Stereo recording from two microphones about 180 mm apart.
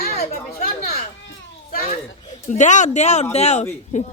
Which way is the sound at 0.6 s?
55° left (ahead or behind).